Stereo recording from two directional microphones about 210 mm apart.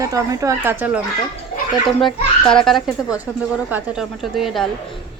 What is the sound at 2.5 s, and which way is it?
A woman's voice, 5° left (ahead or behind).